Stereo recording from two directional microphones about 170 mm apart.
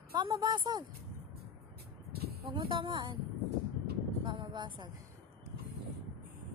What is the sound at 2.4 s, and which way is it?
Speech, 30° right (ahead or behind).